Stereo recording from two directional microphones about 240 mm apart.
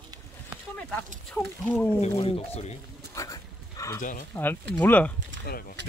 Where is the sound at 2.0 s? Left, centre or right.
Left.